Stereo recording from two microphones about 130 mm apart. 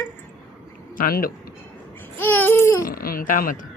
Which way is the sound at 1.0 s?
90° left.